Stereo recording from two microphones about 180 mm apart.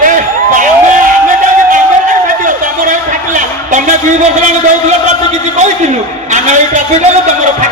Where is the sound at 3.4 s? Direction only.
45° right (ahead or behind).